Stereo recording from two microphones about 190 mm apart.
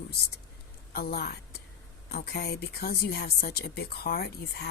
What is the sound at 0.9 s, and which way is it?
Speech, 55° left (ahead or behind).